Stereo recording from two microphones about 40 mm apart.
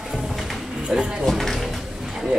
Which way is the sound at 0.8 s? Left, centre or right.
Centre.